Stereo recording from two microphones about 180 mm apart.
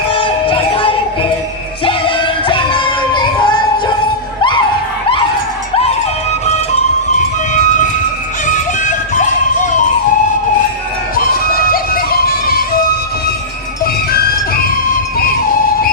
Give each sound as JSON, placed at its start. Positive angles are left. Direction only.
{"t": 0.1, "sound": "music", "side_deg": 30}
{"t": 8.4, "sound": "music", "side_deg": 45}
{"t": 11.1, "sound": "music", "side_deg": 55}
{"t": 14.1, "sound": "music", "side_deg": 55}